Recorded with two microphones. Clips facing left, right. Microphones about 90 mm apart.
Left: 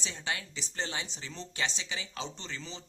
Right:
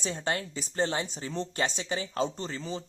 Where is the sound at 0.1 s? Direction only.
45° right (ahead or behind).